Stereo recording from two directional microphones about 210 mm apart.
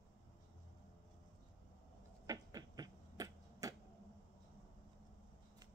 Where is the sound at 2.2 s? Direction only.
15° right (ahead or behind).